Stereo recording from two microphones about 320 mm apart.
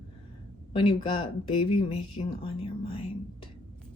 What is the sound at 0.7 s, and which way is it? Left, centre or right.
A woman's voice, centre.